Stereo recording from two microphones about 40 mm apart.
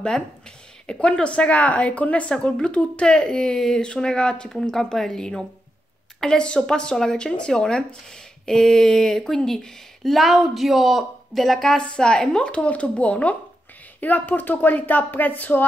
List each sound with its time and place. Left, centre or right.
0.8 s a woman's voice: left
2.6 s speech: left
4.5 s speech: centre
10.0 s a woman's voice: centre
11.8 s speech: left
14.0 s speech: left